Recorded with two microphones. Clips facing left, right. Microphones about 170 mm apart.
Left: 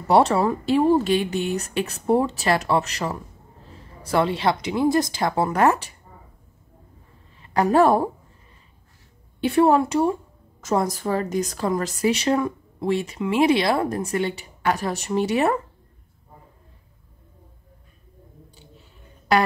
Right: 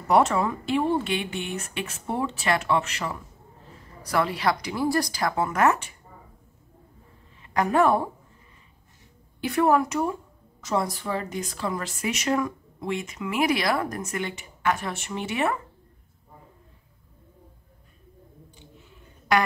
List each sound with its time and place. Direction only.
0.1 s speech: 35° left (ahead or behind)
3.7 s speech: 25° left (ahead or behind)
7.5 s speech: 35° left (ahead or behind)
9.4 s speech: 30° left (ahead or behind)
10.6 s speech: 45° left (ahead or behind)